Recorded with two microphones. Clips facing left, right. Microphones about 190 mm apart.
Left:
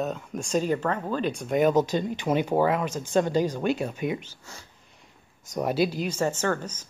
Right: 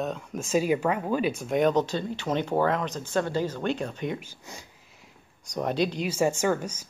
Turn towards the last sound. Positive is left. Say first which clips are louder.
# right 2 dB
turn(degrees=-10)  # may be behind; listen again after turning